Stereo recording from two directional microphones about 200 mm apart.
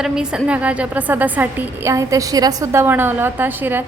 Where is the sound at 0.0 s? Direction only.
5° right (ahead or behind).